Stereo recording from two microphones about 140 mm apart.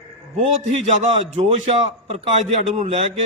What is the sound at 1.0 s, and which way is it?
A man's voice, 45° right (ahead or behind).